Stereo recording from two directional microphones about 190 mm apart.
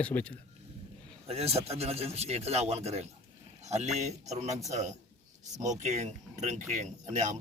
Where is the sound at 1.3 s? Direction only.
35° right (ahead or behind).